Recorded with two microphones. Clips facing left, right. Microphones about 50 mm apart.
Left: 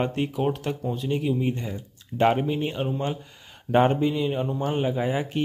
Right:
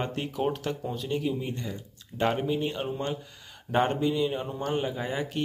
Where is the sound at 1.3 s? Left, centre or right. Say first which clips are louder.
Left 6 dB; left.